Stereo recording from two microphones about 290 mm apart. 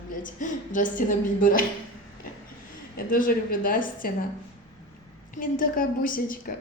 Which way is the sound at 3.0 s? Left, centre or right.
Left.